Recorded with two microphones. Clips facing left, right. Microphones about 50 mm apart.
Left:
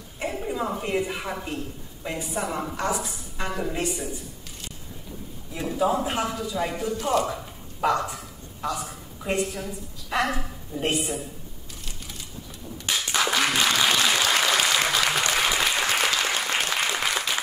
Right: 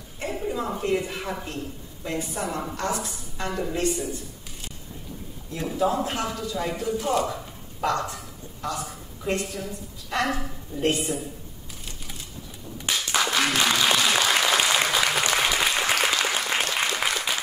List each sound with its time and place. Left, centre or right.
0.2 s a woman's voice: centre
5.5 s a woman's voice: centre
11.8 s a sound: centre
12.9 s applause: centre